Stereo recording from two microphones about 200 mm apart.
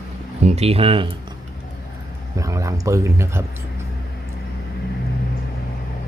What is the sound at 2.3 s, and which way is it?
Speech, 15° right (ahead or behind).